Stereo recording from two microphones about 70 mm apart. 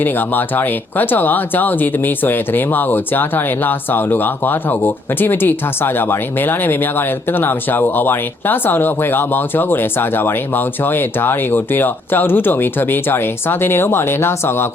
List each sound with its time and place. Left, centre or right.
0.0 s speech: left